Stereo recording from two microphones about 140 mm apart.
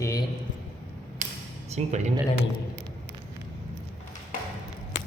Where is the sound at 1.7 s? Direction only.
55° right (ahead or behind).